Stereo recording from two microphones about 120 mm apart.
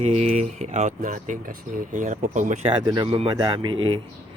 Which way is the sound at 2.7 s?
40° right (ahead or behind).